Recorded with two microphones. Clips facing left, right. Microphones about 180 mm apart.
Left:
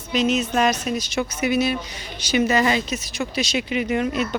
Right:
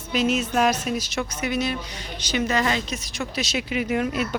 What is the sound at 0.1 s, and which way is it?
Speech, 5° right (ahead or behind).